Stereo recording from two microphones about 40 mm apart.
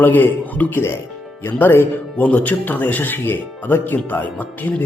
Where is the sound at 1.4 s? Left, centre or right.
Left.